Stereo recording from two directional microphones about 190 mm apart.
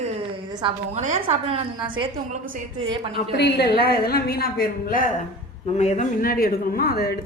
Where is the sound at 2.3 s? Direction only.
45° right (ahead or behind).